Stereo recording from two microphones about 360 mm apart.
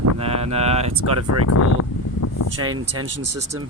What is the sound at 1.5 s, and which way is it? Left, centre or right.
Speech, left.